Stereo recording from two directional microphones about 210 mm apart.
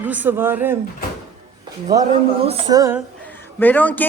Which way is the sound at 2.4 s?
25° right (ahead or behind).